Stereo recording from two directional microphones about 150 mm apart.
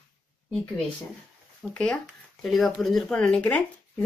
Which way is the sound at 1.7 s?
5° left (ahead or behind).